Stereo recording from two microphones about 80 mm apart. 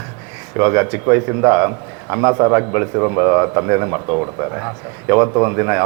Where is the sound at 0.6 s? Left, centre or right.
Right.